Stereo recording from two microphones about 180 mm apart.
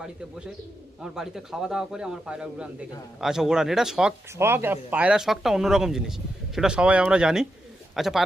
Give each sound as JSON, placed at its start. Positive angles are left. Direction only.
{"t": 1.0, "sound": "speech", "side_deg": 0}
{"t": 4.4, "sound": "speech", "side_deg": -15}